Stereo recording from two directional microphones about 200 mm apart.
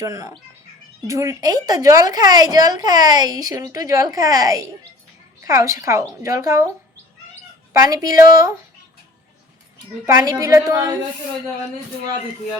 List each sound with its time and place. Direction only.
0.0 s a woman's voice: 15° right (ahead or behind)
7.7 s a woman's voice: 15° right (ahead or behind)
9.7 s a woman's voice: 20° right (ahead or behind)